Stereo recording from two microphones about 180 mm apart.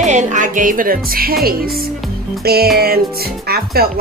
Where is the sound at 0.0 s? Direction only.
40° right (ahead or behind).